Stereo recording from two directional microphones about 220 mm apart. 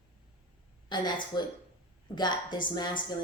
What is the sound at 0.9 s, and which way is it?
A woman's voice, 20° left (ahead or behind).